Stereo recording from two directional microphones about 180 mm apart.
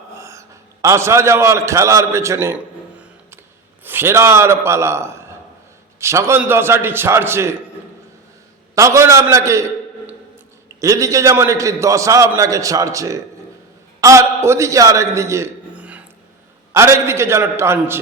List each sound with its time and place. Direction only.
0.1 s a man's voice: 15° right (ahead or behind)
3.8 s a man's voice: 15° right (ahead or behind)
8.7 s a man's voice: 15° right (ahead or behind)
10.8 s a man's voice: 20° right (ahead or behind)